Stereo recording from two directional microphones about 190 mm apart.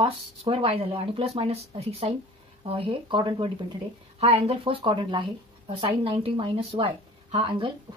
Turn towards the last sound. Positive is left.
turn(degrees=-30)  # may be behind; listen again after turning